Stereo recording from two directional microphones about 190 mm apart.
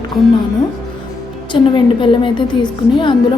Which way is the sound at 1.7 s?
25° left (ahead or behind).